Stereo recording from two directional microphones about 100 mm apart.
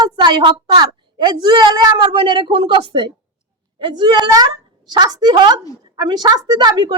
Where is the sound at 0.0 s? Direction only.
45° right (ahead or behind).